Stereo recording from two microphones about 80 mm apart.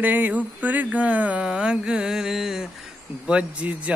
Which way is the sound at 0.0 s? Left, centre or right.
Right.